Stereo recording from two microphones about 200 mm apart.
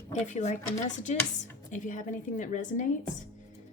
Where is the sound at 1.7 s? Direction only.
40° left (ahead or behind).